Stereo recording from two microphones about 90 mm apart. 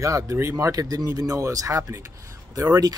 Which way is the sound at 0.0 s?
35° right (ahead or behind).